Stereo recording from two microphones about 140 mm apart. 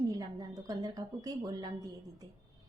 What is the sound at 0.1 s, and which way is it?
A woman's voice, 25° right (ahead or behind).